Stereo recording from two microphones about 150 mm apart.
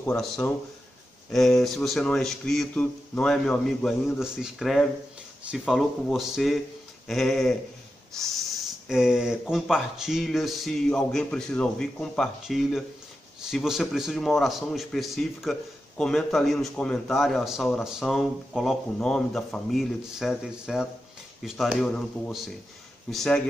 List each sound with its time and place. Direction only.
0.2 s a man's voice: centre (ahead or behind)